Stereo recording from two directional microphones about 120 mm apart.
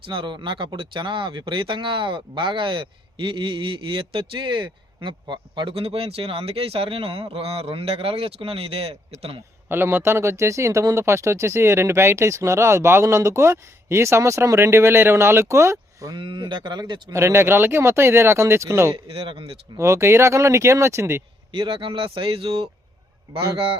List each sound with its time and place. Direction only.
0.0 s speech: 40° right (ahead or behind)
9.6 s speech: 20° right (ahead or behind); by 17.0 s 35° right (ahead or behind)
17.1 s speech: 20° right (ahead or behind)
18.9 s speech: 50° right (ahead or behind)
19.7 s speech: 25° right (ahead or behind)
21.5 s speech: 45° right (ahead or behind)